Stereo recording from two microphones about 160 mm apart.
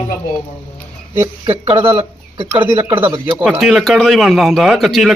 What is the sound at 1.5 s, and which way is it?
Speech, 35° right (ahead or behind).